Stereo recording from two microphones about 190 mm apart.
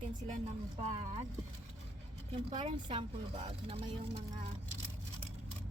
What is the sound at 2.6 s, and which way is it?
Speech, 25° right (ahead or behind).